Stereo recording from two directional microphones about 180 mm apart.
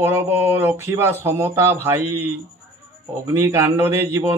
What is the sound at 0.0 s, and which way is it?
Speech, 10° right (ahead or behind).